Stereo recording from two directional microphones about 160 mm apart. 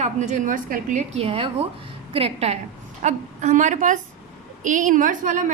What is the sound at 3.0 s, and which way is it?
A woman's voice, 50° right (ahead or behind).